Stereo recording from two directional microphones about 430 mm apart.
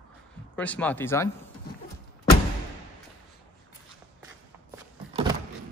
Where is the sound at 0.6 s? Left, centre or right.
Centre.